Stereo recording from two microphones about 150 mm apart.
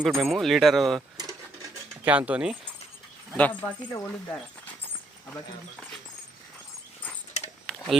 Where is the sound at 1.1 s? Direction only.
25° right (ahead or behind).